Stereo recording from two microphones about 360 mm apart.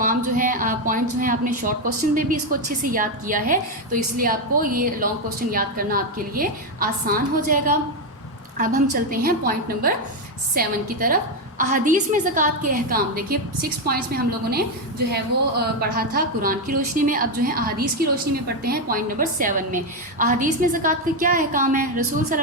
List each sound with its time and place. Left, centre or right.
0.0 s a woman's voice: right
15.8 s a woman's voice: right